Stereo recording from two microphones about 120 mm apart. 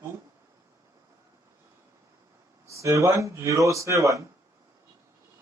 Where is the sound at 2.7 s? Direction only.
25° right (ahead or behind).